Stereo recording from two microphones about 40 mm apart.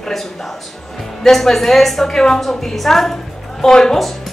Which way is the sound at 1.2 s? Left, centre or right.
Centre.